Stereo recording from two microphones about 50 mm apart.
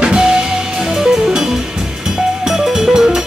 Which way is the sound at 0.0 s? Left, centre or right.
Centre.